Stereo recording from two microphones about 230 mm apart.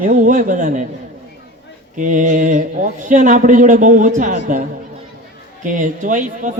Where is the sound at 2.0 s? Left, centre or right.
Right.